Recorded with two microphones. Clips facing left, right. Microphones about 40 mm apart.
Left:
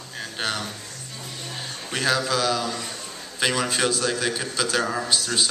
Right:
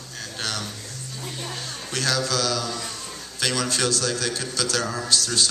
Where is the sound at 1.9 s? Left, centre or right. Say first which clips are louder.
Left 2 dB; centre.